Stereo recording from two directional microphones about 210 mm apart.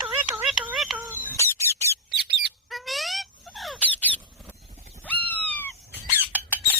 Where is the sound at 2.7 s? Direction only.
Centre (ahead or behind).